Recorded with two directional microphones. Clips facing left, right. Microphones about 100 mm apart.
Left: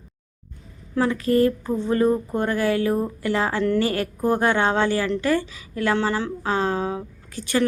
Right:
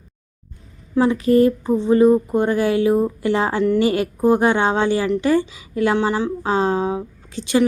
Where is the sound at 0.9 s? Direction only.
20° right (ahead or behind).